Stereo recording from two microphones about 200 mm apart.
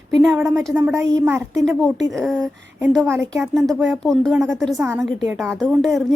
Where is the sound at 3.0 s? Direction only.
15° right (ahead or behind).